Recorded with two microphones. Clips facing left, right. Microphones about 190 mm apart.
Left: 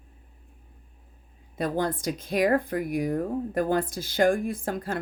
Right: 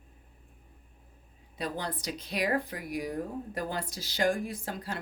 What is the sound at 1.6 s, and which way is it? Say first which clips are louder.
Speech: left 8 dB; 50° left (ahead or behind).